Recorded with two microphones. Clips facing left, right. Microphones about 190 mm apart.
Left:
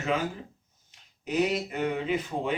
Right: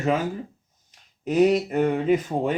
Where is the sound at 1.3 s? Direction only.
45° right (ahead or behind).